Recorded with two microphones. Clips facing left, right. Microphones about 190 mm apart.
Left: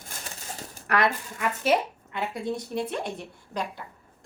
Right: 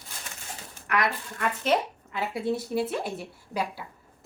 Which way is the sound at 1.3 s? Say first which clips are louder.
Even; 5° left (ahead or behind).